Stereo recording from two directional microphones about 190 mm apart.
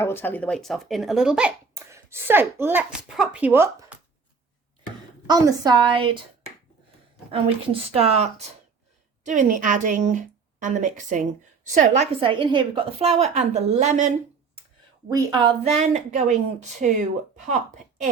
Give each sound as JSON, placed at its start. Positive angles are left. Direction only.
{"t": 0.0, "sound": "speech", "side_deg": 10}
{"t": 5.2, "sound": "a woman's voice", "side_deg": -20}
{"t": 7.3, "sound": "a woman's voice", "side_deg": -30}
{"t": 12.2, "sound": "a woman's voice", "side_deg": -25}
{"t": 15.1, "sound": "a woman's voice", "side_deg": -20}
{"t": 15.8, "sound": "a woman's voice", "side_deg": -40}
{"t": 17.4, "sound": "a woman's voice", "side_deg": -40}